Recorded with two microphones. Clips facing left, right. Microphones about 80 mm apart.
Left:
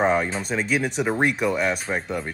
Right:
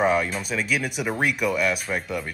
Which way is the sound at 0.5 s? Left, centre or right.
Left.